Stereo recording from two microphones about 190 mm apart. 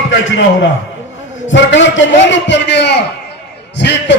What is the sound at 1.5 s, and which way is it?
A man's voice, 75° left (ahead or behind).